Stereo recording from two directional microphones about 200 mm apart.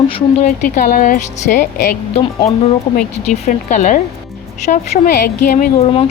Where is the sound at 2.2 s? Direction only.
30° left (ahead or behind).